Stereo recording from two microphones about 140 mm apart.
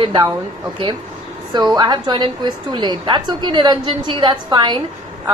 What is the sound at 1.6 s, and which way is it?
A woman's voice, 30° right (ahead or behind).